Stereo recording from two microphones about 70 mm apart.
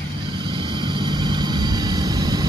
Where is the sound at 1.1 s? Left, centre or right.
Right.